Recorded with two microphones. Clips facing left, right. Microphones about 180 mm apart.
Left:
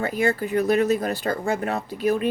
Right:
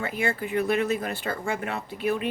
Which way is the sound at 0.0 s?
40° left (ahead or behind).